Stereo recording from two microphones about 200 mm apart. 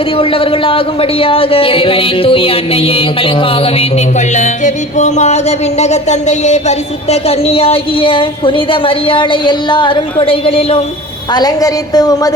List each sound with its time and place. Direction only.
0.2 s speech: 25° left (ahead or behind)